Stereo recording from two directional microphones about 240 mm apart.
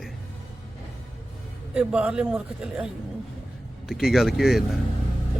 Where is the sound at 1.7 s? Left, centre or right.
Centre.